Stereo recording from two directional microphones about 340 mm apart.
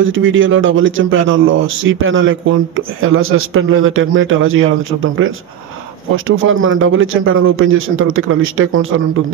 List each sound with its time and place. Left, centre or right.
0.0 s speech: right